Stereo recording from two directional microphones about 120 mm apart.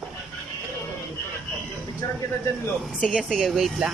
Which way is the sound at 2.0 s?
25° left (ahead or behind).